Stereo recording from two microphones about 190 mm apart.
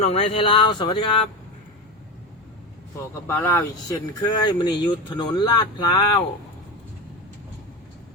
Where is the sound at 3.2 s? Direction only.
10° left (ahead or behind).